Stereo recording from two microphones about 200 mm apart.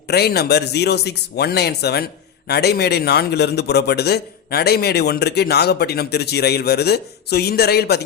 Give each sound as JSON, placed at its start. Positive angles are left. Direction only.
{"t": 0.1, "sound": "a man's voice", "side_deg": 55}